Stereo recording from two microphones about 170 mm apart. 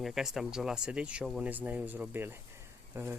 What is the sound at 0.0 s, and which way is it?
Speech, centre (ahead or behind).